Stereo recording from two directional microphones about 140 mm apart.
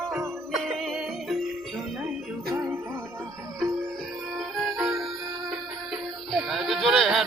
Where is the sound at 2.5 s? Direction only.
20° right (ahead or behind).